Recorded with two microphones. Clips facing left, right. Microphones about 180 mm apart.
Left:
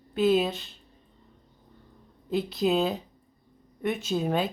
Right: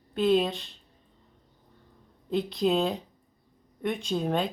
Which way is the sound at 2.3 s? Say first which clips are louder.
Even; 5° left (ahead or behind).